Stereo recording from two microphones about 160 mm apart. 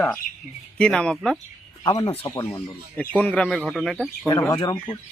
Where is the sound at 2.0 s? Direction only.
35° left (ahead or behind).